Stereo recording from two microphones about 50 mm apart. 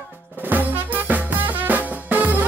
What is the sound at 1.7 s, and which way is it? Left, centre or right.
Music, right.